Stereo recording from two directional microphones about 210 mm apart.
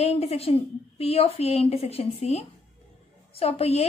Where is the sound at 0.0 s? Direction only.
30° left (ahead or behind).